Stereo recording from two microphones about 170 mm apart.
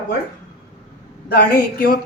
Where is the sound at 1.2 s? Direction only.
65° left (ahead or behind).